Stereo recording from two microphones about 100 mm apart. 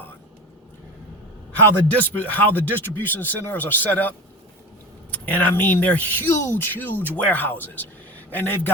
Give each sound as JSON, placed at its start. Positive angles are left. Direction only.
{"t": 1.9, "sound": "speech", "side_deg": 15}
{"t": 5.1, "sound": "a man's voice", "side_deg": 15}